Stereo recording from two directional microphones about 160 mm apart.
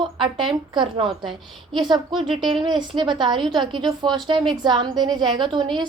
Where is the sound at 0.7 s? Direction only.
30° right (ahead or behind).